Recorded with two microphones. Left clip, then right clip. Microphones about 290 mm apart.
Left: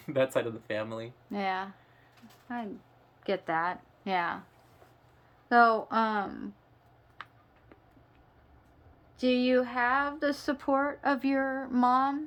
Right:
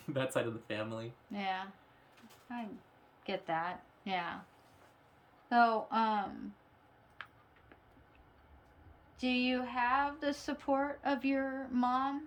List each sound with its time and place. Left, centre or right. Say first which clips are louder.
0.1 s speech: left 7 dB; centre
1.3 s speech: left 6 dB; centre
3.2 s a woman's voice: left 7 dB; centre
5.5 s speech: left 6 dB; centre
7.2 s tick: left 3 dB; left
9.1 s speech: left 8 dB; centre